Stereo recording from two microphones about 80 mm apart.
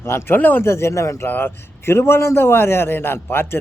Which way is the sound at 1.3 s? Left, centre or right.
Left.